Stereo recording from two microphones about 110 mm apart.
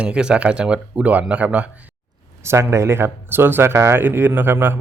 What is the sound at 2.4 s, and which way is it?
Speech, 25° right (ahead or behind).